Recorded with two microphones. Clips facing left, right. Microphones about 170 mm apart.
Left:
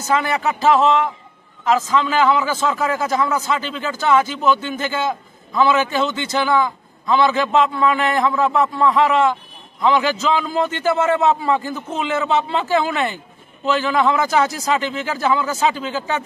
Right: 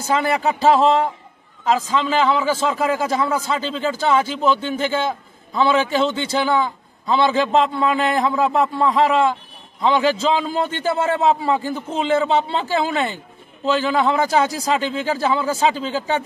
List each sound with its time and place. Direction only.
0.0 s a man's voice: 30° right (ahead or behind)